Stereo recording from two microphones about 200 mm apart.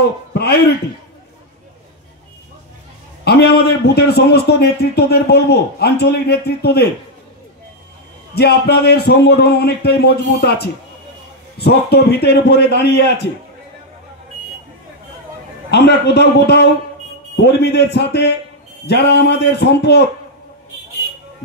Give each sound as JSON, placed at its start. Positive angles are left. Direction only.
{"t": 0.3, "sound": "a man's voice", "side_deg": 55}
{"t": 3.3, "sound": "a man's voice", "side_deg": 55}
{"t": 8.4, "sound": "a man's voice", "side_deg": 55}
{"t": 15.7, "sound": "a man's voice", "side_deg": 55}